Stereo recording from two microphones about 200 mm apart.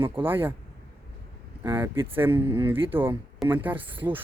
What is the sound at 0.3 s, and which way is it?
Speech, 10° right (ahead or behind).